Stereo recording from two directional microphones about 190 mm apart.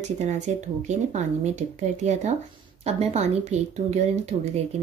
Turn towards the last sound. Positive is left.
turn(degrees=-35)  # may be behind; listen again after turning